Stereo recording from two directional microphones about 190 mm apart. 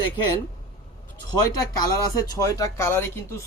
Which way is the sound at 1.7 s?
20° left (ahead or behind).